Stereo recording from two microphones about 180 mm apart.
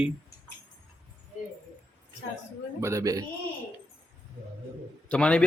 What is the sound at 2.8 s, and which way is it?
Speech, 15° right (ahead or behind).